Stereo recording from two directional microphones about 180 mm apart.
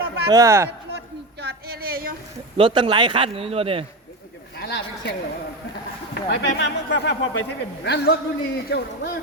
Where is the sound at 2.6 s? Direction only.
30° right (ahead or behind).